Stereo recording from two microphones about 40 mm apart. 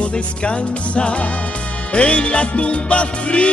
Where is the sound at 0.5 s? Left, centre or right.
Left.